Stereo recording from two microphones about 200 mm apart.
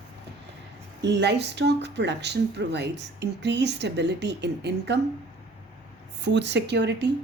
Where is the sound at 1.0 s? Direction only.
60° right (ahead or behind).